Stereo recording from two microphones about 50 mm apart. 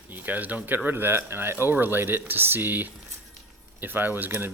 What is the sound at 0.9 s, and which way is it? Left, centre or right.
Speech, right.